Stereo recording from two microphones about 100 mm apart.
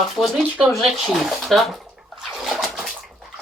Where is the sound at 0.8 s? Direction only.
Centre (ahead or behind).